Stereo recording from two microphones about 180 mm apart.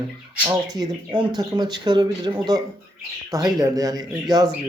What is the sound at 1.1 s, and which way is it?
Speech, 25° right (ahead or behind).